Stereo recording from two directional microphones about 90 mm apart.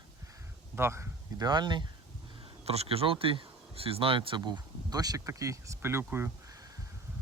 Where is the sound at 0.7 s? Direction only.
30° right (ahead or behind).